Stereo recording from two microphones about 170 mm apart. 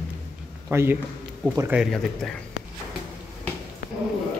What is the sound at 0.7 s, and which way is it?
A man's voice, 15° right (ahead or behind).